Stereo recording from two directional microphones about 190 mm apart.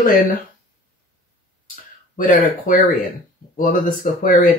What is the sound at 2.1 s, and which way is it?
Speech, 45° left (ahead or behind).